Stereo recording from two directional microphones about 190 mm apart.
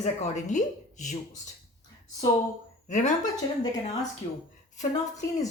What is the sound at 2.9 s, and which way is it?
Speech, 40° left (ahead or behind).